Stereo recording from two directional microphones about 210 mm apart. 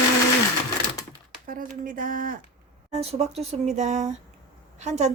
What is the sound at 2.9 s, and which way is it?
A woman's voice, 30° right (ahead or behind).